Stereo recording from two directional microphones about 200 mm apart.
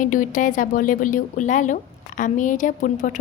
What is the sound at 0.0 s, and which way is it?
A woman's voice, 40° left (ahead or behind).